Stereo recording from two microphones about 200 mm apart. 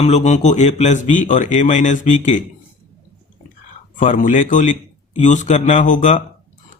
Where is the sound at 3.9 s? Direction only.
40° left (ahead or behind).